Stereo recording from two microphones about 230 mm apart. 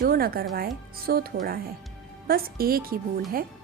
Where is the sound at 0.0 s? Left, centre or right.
Right.